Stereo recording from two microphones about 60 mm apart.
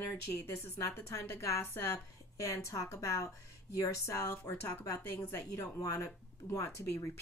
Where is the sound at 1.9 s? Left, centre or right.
Left.